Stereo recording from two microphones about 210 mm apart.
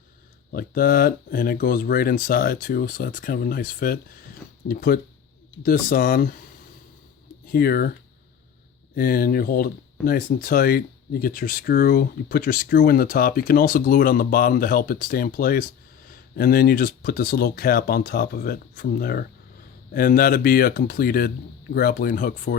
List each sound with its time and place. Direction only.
0.5 s speech: 45° left (ahead or behind)
7.5 s speech: 45° left (ahead or behind)
9.0 s speech: 45° left (ahead or behind)